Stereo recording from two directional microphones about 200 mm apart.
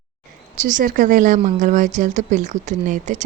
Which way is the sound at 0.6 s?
40° right (ahead or behind).